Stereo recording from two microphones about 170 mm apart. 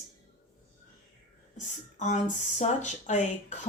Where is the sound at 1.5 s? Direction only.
45° left (ahead or behind).